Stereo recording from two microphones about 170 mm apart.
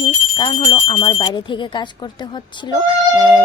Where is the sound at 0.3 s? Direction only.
25° left (ahead or behind).